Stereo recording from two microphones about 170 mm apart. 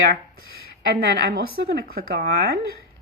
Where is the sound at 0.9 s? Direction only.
65° right (ahead or behind).